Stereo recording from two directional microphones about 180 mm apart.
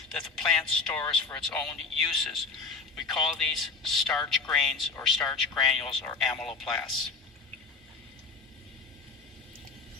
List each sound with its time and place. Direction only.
0.2 s a man's voice: 5° left (ahead or behind)